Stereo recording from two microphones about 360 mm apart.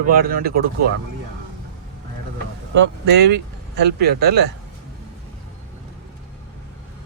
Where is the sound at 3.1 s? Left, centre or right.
Right.